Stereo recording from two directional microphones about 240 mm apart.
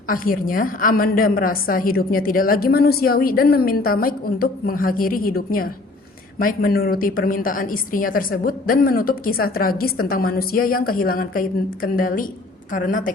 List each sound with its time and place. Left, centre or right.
0.1 s a woman's voice: left